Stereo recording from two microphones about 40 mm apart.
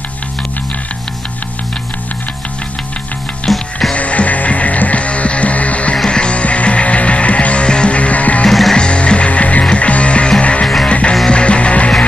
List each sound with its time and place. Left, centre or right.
3.4 s music: centre
3.9 s music: left
6.0 s music: left
8.5 s music: centre
8.7 s music: left